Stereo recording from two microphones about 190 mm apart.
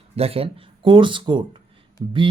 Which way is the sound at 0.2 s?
30° right (ahead or behind).